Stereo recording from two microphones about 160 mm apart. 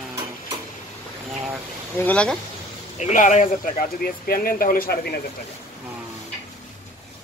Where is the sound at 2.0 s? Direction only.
10° left (ahead or behind).